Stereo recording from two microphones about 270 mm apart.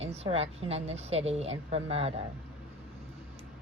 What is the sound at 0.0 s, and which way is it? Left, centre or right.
Speech, right.